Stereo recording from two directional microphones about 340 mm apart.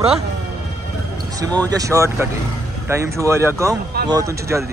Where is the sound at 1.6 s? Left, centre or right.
Centre.